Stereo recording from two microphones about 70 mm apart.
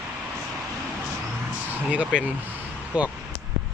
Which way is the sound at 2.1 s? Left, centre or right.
Right.